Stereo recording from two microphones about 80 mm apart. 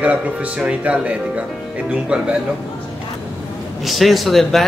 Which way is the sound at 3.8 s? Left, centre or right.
Centre.